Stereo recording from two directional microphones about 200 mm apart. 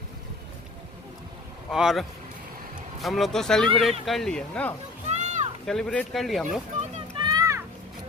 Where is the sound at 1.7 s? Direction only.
Centre (ahead or behind).